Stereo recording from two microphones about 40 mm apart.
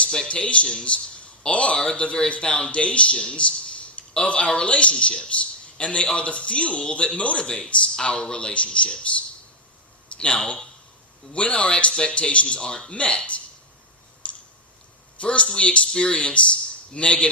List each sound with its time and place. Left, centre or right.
0.0 s a man's voice: left
10.2 s speech: left
14.2 s clicking: left
15.2 s speech: left
15.9 s speech: centre
16.1 s speech: left